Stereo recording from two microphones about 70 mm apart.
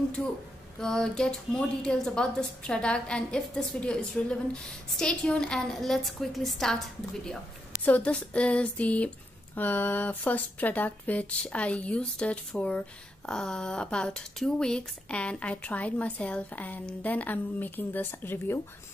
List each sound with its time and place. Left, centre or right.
0.2 s a woman's voice: centre
7.8 s a woman's voice: left